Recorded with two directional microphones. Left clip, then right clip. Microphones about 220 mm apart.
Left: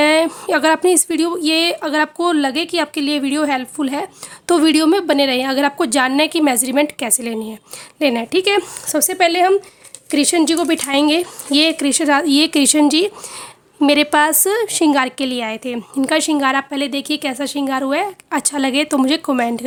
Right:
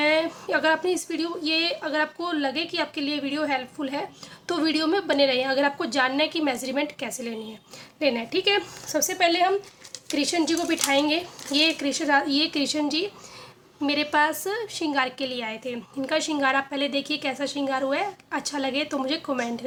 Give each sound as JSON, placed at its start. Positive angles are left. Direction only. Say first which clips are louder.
{"t": 0.0, "sound": "a woman's voice", "louder": "left 9 dB", "side_deg": 50}